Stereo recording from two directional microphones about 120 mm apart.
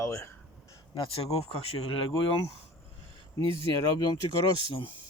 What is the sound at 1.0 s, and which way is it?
Speech, 50° left (ahead or behind).